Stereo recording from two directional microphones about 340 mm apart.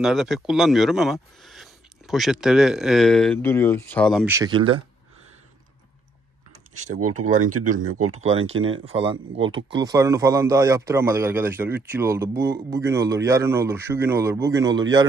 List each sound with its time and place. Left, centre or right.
0.0 s speech: centre
7.2 s speech: right